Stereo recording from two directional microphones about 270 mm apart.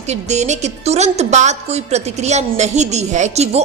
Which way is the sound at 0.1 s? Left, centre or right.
Right.